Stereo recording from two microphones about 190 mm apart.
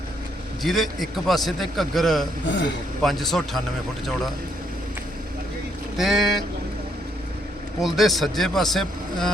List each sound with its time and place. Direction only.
0.6 s a man's voice: centre (ahead or behind)
6.0 s a man's voice: centre (ahead or behind)
7.8 s a man's voice: centre (ahead or behind)